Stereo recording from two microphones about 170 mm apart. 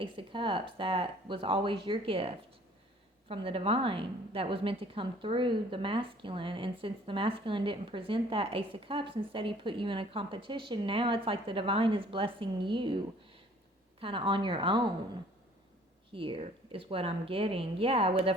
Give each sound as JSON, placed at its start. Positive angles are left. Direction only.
{"t": 0.0, "sound": "a woman's voice", "side_deg": -30}
{"t": 14.0, "sound": "a woman's voice", "side_deg": -30}
{"t": 16.1, "sound": "a woman's voice", "side_deg": -30}